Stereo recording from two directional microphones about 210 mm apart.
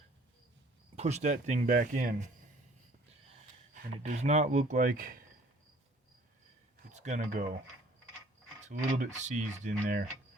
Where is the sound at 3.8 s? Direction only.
35° right (ahead or behind).